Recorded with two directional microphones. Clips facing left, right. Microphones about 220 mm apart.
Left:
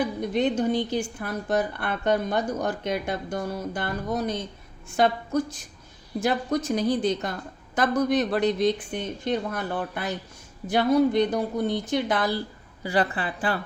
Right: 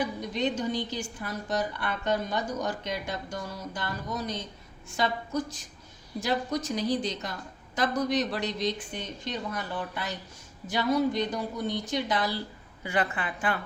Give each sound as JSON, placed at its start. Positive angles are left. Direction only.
{"t": 0.2, "sound": "a woman's voice", "side_deg": 55}
{"t": 12.8, "sound": "speech", "side_deg": 35}